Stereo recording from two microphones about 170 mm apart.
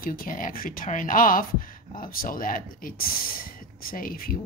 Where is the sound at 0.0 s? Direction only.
55° left (ahead or behind).